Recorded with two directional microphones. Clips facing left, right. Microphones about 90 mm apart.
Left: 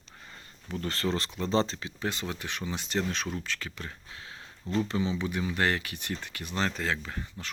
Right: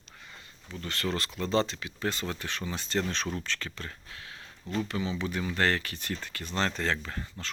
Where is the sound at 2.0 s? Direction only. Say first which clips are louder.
Right 1 dB; 15° left (ahead or behind).